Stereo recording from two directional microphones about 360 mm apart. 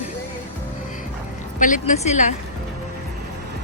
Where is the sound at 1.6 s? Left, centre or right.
Left.